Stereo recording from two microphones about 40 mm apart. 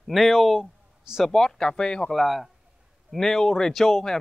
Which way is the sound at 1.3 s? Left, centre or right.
Centre.